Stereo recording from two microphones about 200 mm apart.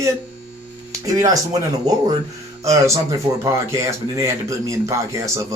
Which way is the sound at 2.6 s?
15° right (ahead or behind).